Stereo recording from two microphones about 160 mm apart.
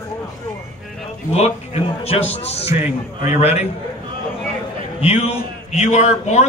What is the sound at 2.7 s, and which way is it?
Speech, 15° right (ahead or behind).